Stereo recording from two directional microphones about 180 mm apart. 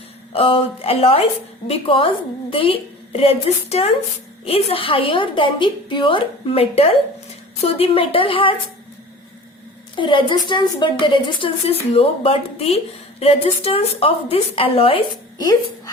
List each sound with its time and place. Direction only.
0.3 s a woman's voice: 30° left (ahead or behind)
9.9 s a woman's voice: 25° left (ahead or behind)